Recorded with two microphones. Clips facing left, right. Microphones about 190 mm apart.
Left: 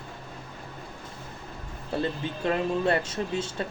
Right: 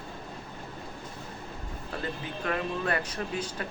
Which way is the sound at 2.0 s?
25° left (ahead or behind).